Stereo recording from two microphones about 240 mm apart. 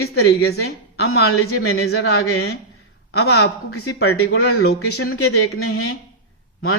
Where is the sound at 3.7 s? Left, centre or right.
Left.